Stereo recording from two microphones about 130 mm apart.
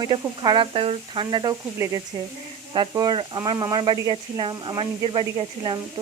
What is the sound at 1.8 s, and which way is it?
Speech, 25° right (ahead or behind).